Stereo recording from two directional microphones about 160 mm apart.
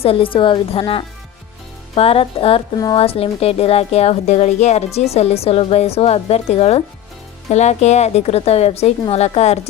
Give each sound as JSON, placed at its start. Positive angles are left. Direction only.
{"t": 0.0, "sound": "speech", "side_deg": 35}
{"t": 2.7, "sound": "speech", "side_deg": 25}
{"t": 3.0, "sound": "speech", "side_deg": 35}